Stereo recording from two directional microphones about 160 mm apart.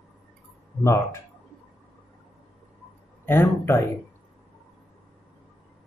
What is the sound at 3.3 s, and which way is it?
Speech, 15° left (ahead or behind).